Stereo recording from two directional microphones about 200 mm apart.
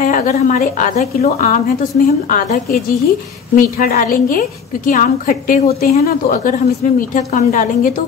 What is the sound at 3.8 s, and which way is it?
A woman's voice, 45° left (ahead or behind).